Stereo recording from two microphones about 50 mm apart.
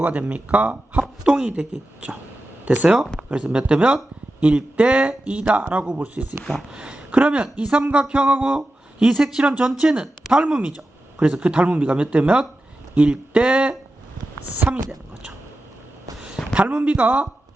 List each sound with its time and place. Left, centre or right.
0.0 s speech: right
1.2 s speech: centre
6.7 s speech: centre
16.1 s a sound: centre
16.7 s speech: right